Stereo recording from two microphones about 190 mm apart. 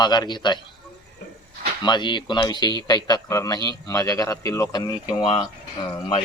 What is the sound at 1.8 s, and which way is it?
Speech, 25° left (ahead or behind).